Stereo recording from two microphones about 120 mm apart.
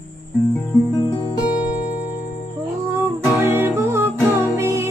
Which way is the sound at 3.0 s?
20° right (ahead or behind).